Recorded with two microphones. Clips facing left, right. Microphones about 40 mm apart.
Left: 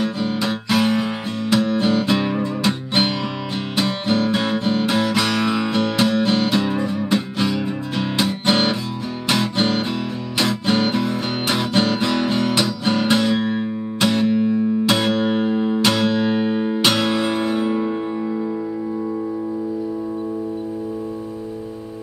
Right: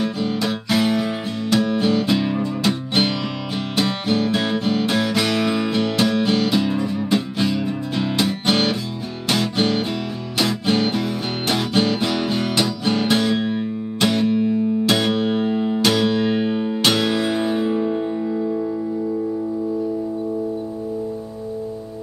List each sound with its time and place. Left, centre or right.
0.0 s music: centre
4.1 s music: centre
10.9 s music: centre